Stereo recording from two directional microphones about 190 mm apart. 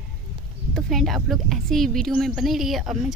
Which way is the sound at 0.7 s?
Centre (ahead or behind).